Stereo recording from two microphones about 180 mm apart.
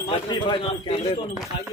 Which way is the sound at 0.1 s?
30° left (ahead or behind).